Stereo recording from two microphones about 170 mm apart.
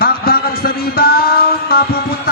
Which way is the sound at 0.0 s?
60° left (ahead or behind).